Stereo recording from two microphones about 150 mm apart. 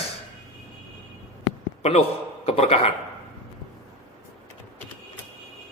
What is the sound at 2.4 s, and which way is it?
Speech, 45° left (ahead or behind).